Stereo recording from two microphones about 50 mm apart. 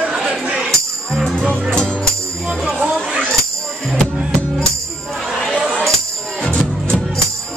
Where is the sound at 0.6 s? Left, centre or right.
Centre.